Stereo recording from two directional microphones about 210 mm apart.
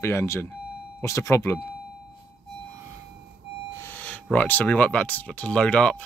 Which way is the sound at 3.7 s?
10° left (ahead or behind).